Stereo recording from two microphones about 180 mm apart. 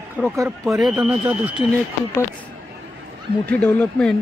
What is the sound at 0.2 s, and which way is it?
Speech, 5° right (ahead or behind).